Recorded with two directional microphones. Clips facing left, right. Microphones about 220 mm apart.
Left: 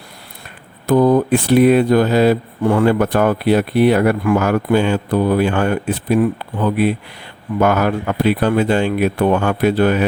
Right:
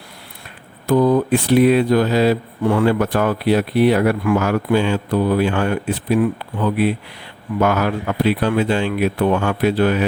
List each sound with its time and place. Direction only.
0.9 s speech: 50° left (ahead or behind)